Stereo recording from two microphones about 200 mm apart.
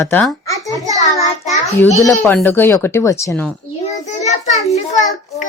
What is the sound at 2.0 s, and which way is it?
Speech, 10° left (ahead or behind).